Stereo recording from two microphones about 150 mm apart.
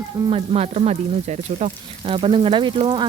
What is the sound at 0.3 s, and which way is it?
Speech, 40° right (ahead or behind).